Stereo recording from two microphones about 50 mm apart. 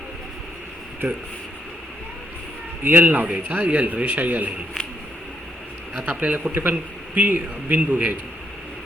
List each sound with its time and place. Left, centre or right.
2.8 s a man's voice: right
6.1 s a man's voice: right